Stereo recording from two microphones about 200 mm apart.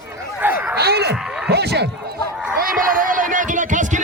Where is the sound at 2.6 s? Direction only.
40° right (ahead or behind).